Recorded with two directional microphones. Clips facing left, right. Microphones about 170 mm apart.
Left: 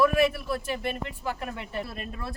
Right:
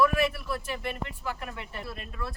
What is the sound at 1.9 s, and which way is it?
Speech, 40° left (ahead or behind).